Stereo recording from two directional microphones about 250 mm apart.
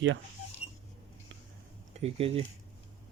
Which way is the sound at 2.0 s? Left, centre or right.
Right.